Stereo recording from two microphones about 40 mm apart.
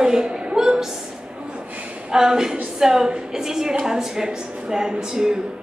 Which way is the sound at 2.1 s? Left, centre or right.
Centre.